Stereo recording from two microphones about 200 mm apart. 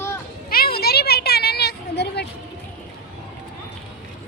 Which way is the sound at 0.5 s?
50° left (ahead or behind).